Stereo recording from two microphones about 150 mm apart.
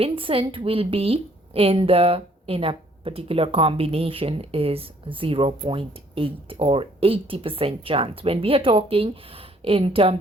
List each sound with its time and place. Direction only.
0.0 s a woman's voice: 35° right (ahead or behind)